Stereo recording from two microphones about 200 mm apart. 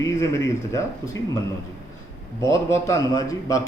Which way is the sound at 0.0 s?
15° left (ahead or behind).